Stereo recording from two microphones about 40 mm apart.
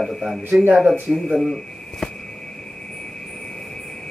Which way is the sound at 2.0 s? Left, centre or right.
Centre.